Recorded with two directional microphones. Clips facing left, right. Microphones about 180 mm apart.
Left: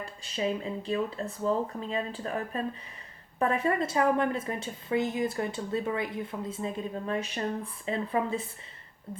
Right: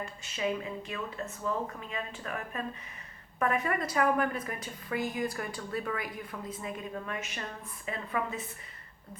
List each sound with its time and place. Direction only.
0.0 s a woman's voice: 30° left (ahead or behind)